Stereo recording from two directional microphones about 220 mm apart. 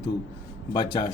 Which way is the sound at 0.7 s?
20° left (ahead or behind).